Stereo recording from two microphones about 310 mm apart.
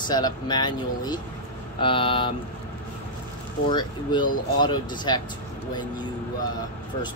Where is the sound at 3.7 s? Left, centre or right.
Centre.